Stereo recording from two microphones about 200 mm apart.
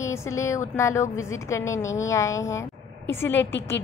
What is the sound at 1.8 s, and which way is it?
Speech, 75° left (ahead or behind).